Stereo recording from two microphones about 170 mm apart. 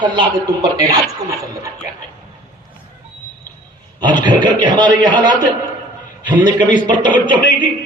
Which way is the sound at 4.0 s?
25° right (ahead or behind).